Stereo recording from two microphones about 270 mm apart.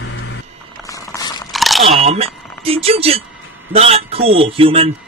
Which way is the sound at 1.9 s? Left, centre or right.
Right.